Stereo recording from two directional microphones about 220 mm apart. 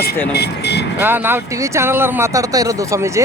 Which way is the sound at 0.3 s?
50° left (ahead or behind).